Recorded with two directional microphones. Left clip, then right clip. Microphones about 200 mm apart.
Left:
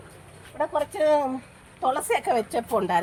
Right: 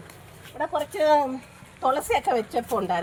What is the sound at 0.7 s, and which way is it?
Speech, 5° left (ahead or behind).